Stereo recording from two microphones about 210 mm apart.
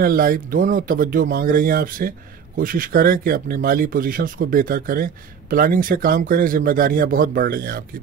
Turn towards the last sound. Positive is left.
turn(degrees=-45)  # may be behind; listen again after turning